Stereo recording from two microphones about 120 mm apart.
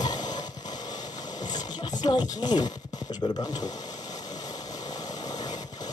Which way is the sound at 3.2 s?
40° left (ahead or behind).